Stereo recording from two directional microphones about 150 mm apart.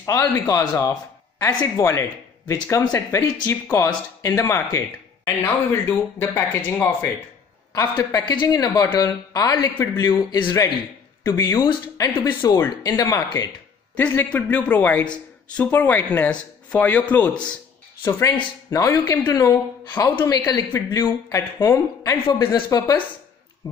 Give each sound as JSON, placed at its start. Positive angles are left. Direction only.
{"t": 0.0, "sound": "speech", "side_deg": 20}
{"t": 13.9, "sound": "speech", "side_deg": 10}
{"t": 18.7, "sound": "speech", "side_deg": 20}